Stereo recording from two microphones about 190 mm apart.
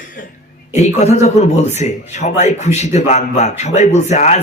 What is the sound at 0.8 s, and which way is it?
Speech, 35° left (ahead or behind).